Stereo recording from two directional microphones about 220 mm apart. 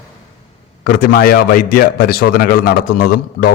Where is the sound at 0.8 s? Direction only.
40° left (ahead or behind).